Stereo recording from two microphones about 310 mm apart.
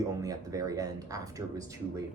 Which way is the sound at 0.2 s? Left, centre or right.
Centre.